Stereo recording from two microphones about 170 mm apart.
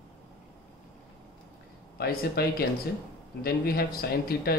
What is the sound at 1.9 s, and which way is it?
Speech, 65° left (ahead or behind).